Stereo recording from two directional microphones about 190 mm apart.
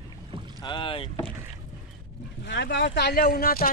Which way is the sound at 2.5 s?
65° left (ahead or behind).